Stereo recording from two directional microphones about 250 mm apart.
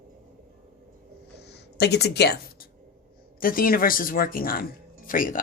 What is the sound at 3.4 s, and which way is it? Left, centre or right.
Speech, left.